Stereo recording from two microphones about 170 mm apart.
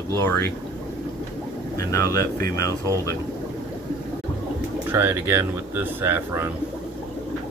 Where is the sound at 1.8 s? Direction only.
20° left (ahead or behind).